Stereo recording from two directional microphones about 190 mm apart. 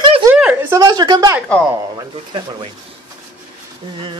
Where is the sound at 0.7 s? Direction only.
20° right (ahead or behind).